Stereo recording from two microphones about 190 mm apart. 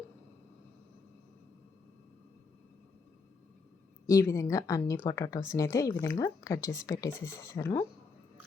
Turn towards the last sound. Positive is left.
turn(degrees=15)  # may be behind; listen again after turning